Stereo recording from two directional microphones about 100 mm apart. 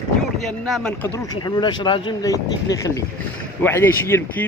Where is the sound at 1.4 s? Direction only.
45° left (ahead or behind).